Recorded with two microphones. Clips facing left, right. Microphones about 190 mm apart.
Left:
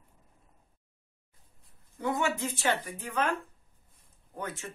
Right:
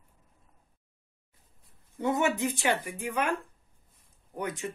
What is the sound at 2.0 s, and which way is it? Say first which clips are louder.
Speech: right 3 dB; 20° right (ahead or behind).